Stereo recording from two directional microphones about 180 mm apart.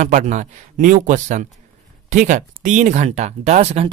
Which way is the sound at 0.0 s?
45° right (ahead or behind).